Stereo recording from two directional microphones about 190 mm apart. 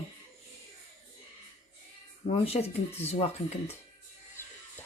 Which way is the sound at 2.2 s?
30° left (ahead or behind).